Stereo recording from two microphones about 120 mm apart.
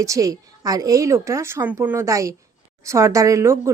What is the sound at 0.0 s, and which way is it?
A woman's voice, 25° right (ahead or behind).